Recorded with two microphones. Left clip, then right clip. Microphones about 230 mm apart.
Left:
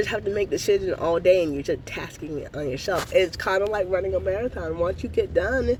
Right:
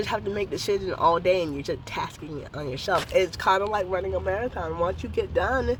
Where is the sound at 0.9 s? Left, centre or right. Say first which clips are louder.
Even; centre.